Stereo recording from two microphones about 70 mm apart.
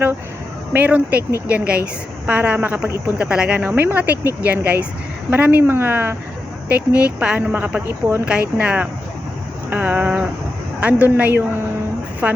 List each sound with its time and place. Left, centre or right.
0.7 s speech: right
3.7 s speech: right
6.7 s speech: centre; by 8.2 s right
8.2 s speech: centre
9.6 s a sound: right
10.8 s speech: centre